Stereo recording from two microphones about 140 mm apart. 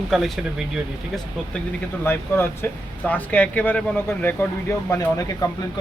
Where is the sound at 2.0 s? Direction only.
15° left (ahead or behind).